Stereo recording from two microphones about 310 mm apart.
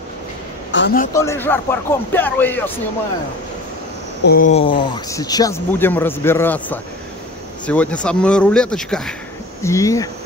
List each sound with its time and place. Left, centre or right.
0.7 s a man's voice: left
1.1 s speech: centre
4.2 s speech: left; by 10.0 s centre